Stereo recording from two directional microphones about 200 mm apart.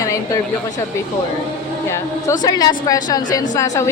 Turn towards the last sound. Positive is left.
turn(degrees=15)  # may be behind; listen again after turning